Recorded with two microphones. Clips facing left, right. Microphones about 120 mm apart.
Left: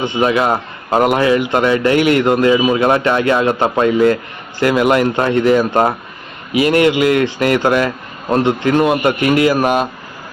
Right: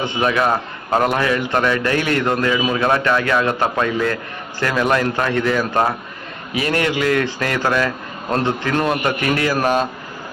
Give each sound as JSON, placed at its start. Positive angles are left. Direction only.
{"t": 0.0, "sound": "speech", "side_deg": 20}